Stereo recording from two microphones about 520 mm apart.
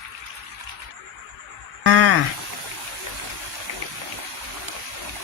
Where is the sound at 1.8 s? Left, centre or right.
Right.